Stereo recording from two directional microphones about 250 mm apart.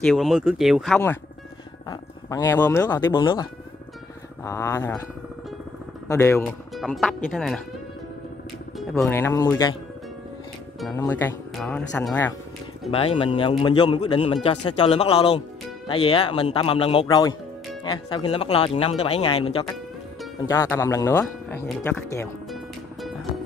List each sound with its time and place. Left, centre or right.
0.0 s speech: centre
4.5 s speech: centre
6.0 s speech: centre
6.7 s speech: centre
8.9 s speech: centre
10.9 s speech: centre
12.9 s speech: left